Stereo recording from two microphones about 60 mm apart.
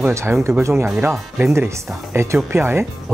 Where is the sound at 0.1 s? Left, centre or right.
Right.